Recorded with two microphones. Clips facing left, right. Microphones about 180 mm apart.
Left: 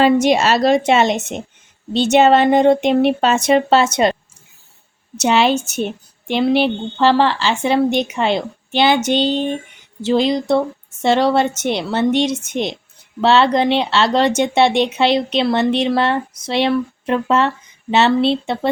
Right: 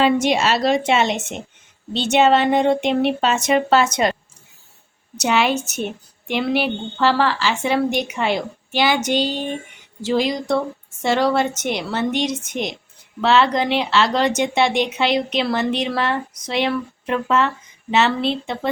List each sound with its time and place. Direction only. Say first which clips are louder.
0.0 s speech: left 4 dB; 40° left (ahead or behind)
5.1 s a woman's voice: left 4 dB; 25° left (ahead or behind)